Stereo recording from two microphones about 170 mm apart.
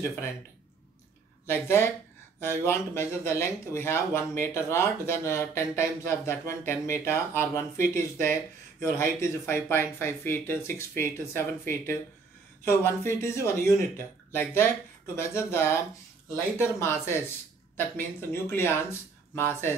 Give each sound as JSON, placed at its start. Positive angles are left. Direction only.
{"t": 0.0, "sound": "speech", "side_deg": 15}
{"t": 1.4, "sound": "speech", "side_deg": 15}